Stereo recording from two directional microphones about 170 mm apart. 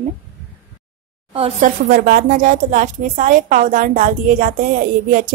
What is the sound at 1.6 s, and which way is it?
A woman's voice, 50° right (ahead or behind).